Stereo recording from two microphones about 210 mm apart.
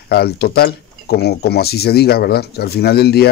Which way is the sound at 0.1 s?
50° left (ahead or behind).